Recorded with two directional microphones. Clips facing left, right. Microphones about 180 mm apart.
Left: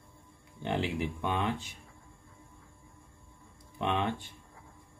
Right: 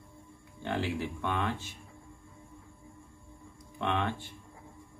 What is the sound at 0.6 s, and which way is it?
Speech, 15° left (ahead or behind).